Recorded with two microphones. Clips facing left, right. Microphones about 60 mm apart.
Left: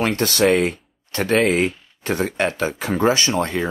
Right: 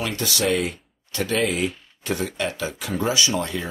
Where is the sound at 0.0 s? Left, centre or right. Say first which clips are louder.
Left 7 dB; left.